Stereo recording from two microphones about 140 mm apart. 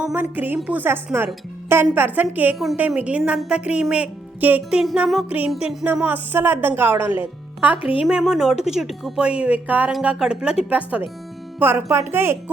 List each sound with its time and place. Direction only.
0.0 s a woman's voice: 10° right (ahead or behind)
5.6 s a woman's voice: 10° right (ahead or behind)